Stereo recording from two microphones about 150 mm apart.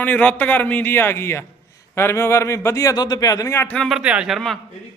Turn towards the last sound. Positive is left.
turn(degrees=0)  # may be behind; listen again after turning